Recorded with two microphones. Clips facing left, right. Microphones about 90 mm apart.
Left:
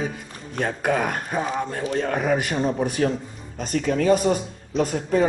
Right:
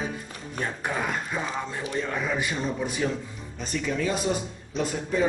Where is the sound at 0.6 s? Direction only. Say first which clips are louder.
Left 7 dB; 70° left (ahead or behind).